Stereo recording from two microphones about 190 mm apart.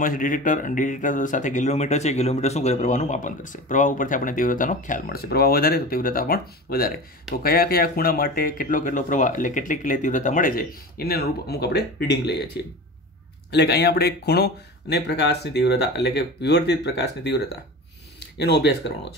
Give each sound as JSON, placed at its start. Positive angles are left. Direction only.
{"t": 0.0, "sound": "speech", "side_deg": 45}